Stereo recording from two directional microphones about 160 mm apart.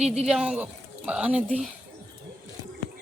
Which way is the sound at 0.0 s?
5° right (ahead or behind).